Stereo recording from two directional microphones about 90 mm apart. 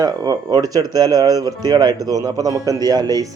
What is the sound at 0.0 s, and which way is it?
Speech, 45° right (ahead or behind).